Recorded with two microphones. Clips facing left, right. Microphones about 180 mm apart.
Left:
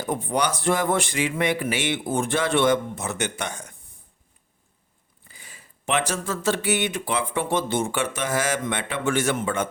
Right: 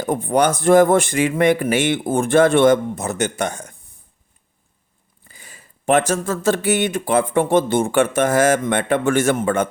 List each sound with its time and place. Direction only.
0.0 s speech: 50° right (ahead or behind)
5.3 s speech: 45° right (ahead or behind)